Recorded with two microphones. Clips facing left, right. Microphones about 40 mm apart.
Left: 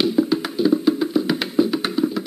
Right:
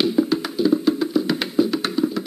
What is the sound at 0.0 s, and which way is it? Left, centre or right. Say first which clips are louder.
Music: left 1 dB; centre.